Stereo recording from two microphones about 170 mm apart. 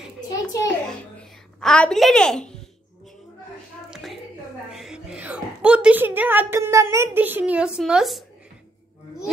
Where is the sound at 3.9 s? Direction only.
Centre (ahead or behind).